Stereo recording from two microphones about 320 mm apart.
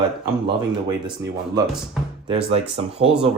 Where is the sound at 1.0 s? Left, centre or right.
Centre.